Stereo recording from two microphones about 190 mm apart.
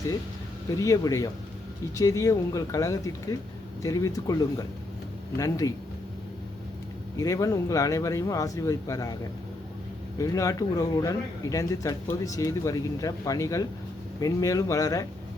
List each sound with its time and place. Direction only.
0.8 s speech: 15° left (ahead or behind)
7.2 s speech: 15° left (ahead or behind)
10.2 s speech: 15° left (ahead or behind)